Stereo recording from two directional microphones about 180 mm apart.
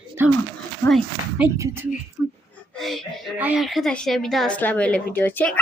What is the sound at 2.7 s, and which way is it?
A woman's voice, centre (ahead or behind).